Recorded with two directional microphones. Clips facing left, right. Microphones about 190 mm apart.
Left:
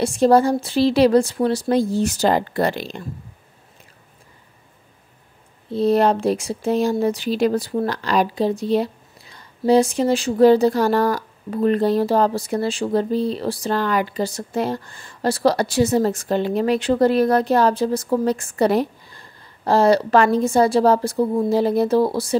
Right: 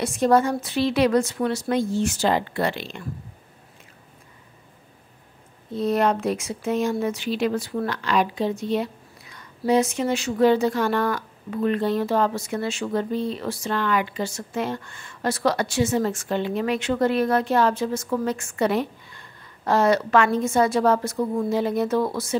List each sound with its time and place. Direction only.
0.0 s speech: 30° left (ahead or behind)
5.7 s speech: 30° left (ahead or behind)